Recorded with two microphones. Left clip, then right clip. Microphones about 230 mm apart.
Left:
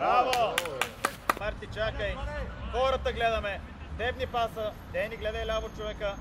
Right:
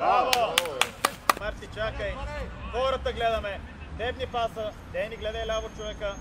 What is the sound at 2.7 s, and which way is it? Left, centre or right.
Speech, left.